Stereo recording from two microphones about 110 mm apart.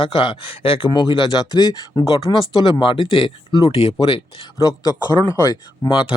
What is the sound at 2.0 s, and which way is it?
Speech, 55° left (ahead or behind).